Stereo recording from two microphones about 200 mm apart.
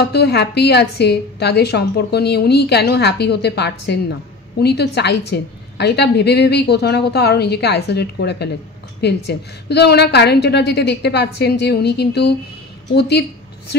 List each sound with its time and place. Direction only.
0.0 s a woman's voice: 55° left (ahead or behind)